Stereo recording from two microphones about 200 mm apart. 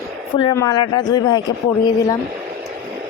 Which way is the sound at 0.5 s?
20° left (ahead or behind).